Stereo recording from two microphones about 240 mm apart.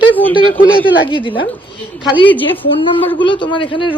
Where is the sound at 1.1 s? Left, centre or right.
Left.